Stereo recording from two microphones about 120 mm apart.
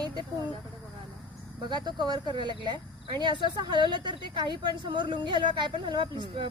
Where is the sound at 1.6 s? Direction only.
40° right (ahead or behind).